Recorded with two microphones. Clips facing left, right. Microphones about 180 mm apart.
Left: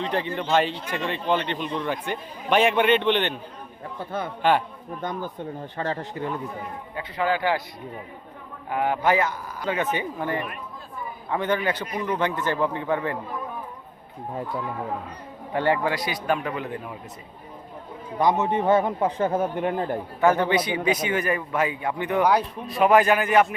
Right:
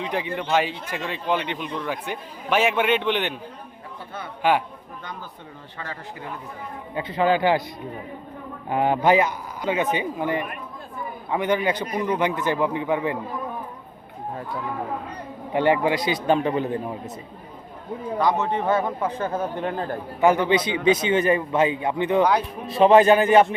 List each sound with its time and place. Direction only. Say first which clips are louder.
0.0 s speech: left 1 dB; 10° right (ahead or behind)
5.0 s speech: left 10 dB; 45° left (ahead or behind)
6.9 s a man's voice: right 5 dB; 20° right (ahead or behind)
8.7 s speech: right 3 dB; 25° right (ahead or behind)
15.5 s a man's voice: right 3 dB; 15° right (ahead or behind)
18.2 s speech: left 1 dB; 20° left (ahead or behind)
20.2 s a man's voice: right 2 dB; 15° right (ahead or behind)
22.2 s speech: left 1 dB; 10° left (ahead or behind)
22.6 s a man's voice: right 5 dB; 25° right (ahead or behind)